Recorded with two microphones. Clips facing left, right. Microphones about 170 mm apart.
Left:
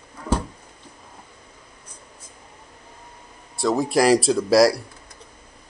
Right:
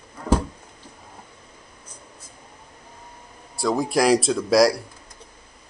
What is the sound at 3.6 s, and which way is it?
A man's voice, centre (ahead or behind).